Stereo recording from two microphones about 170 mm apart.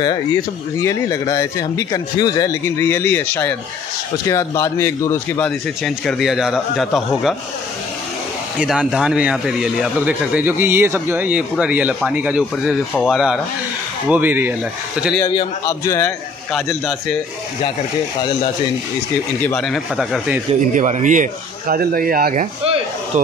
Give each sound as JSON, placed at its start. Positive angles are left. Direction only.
{"t": 0.7, "sound": "speech", "side_deg": 20}
{"t": 5.9, "sound": "speech", "side_deg": 0}
{"t": 8.5, "sound": "speech", "side_deg": -5}
{"t": 15.1, "sound": "speech", "side_deg": 20}
{"t": 16.5, "sound": "speech", "side_deg": 0}
{"t": 19.4, "sound": "speech", "side_deg": 5}
{"t": 20.7, "sound": "speech", "side_deg": -45}